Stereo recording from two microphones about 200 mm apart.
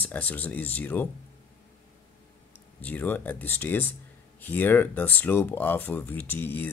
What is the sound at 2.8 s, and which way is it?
Speech, 10° left (ahead or behind).